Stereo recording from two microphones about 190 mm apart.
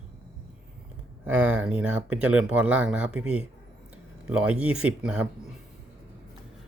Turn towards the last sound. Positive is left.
turn(degrees=-5)  # may be behind; listen again after turning